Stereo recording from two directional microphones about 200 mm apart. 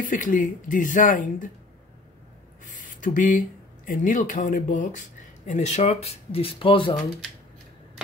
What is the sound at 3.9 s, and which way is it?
Speech, 40° left (ahead or behind).